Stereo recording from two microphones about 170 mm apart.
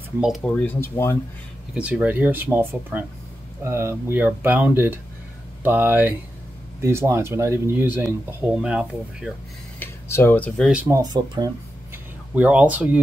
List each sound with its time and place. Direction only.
0.2 s speech: centre (ahead or behind)
1.8 s speech: 5° right (ahead or behind)
9.8 s a sound: 15° left (ahead or behind)
10.7 s speech: 10° right (ahead or behind)
11.0 s speech: 25° right (ahead or behind)
12.4 s speech: 10° right (ahead or behind)